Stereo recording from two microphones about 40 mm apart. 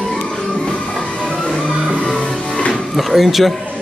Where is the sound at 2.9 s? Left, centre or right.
Centre.